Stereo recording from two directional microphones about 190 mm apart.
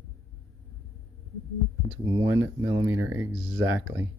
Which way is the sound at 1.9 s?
15° right (ahead or behind).